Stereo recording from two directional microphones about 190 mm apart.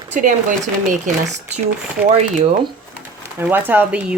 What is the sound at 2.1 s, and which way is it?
Speech, 35° right (ahead or behind).